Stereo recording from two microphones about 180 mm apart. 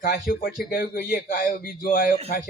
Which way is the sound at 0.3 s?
50° left (ahead or behind).